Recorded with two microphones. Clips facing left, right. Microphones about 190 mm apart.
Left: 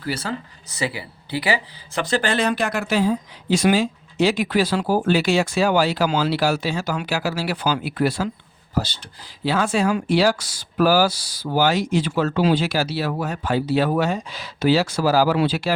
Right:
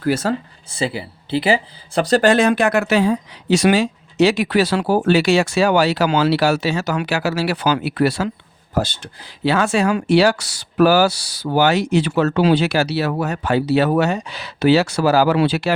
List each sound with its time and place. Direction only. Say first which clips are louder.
0.0 s speech: right 8 dB; 45° right (ahead or behind)
0.7 s speech: right 4 dB; 30° right (ahead or behind); by 8.3 s 75° right (ahead or behind)
9.4 s speech: right 3 dB; 75° right (ahead or behind)